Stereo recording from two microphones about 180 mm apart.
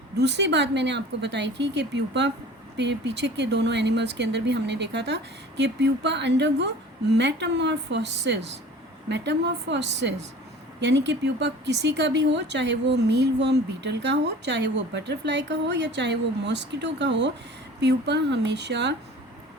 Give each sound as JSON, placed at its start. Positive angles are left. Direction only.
{"t": 0.2, "sound": "a woman's voice", "side_deg": -70}